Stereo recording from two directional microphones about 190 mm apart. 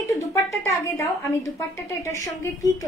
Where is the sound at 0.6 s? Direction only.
15° left (ahead or behind).